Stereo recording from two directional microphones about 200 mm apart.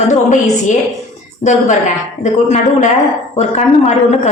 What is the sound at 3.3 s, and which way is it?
Speech, 35° left (ahead or behind).